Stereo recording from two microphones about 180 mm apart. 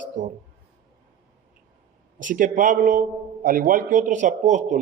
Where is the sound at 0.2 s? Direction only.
45° right (ahead or behind).